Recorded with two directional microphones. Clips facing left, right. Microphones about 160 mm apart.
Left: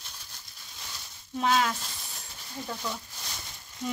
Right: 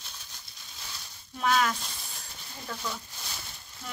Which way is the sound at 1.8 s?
Centre (ahead or behind).